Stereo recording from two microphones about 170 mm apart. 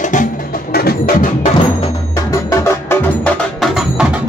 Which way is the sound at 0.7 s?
60° left (ahead or behind).